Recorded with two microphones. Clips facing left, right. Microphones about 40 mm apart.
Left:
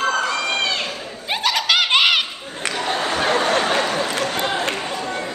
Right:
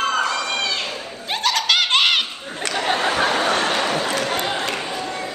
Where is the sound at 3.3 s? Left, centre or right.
Centre.